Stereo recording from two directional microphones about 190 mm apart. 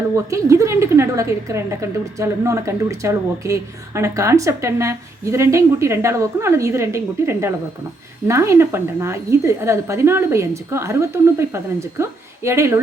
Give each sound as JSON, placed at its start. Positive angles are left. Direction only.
{"t": 0.3, "sound": "a woman's voice", "side_deg": -15}